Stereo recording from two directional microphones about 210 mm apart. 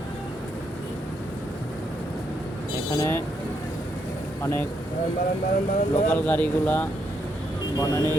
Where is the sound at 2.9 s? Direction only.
10° left (ahead or behind).